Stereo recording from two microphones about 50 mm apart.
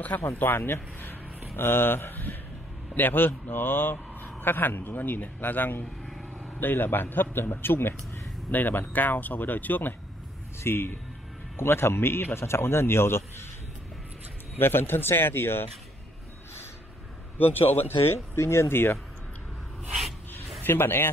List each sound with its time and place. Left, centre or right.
0.1 s speech: left
1.6 s a man's voice: left
10.6 s speech: left
14.6 s speech: left
17.4 s speech: left
18.7 s speech: left
20.0 s a sound: centre
20.6 s speech: left